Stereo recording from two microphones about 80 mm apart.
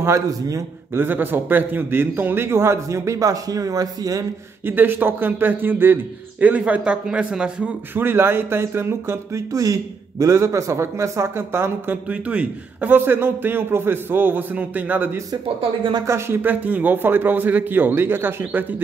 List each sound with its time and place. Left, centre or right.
0.0 s a man's voice: right
0.9 s speech: right
4.6 s a man's voice: right
7.9 s speech: right
12.1 s a man's voice: centre
16.1 s speech: right
16.3 s a man's voice: centre